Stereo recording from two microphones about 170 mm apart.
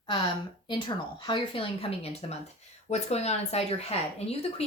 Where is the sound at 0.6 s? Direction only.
30° left (ahead or behind).